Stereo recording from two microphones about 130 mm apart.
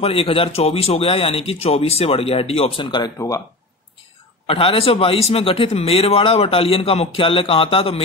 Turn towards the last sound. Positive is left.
turn(degrees=45)  # may be behind; listen again after turning